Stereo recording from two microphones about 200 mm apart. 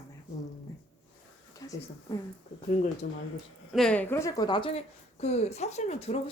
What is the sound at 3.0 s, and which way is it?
Speech, 50° left (ahead or behind).